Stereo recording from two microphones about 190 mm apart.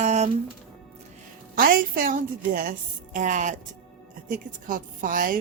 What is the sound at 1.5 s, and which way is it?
A woman's voice, 50° right (ahead or behind).